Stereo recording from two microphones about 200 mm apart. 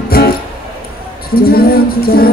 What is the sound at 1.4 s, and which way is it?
Music, 50° left (ahead or behind).